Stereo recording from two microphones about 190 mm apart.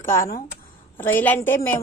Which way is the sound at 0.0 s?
10° left (ahead or behind).